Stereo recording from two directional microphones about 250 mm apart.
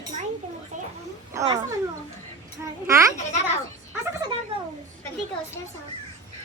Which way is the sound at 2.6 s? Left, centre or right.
Centre.